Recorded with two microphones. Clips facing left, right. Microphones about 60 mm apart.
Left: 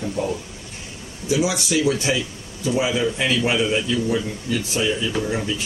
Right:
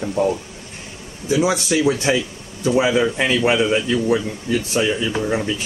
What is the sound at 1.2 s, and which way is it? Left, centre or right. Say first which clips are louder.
Speech: right 3 dB; right.